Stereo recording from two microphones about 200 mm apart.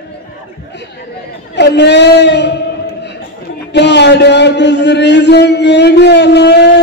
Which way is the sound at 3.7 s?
60° left (ahead or behind).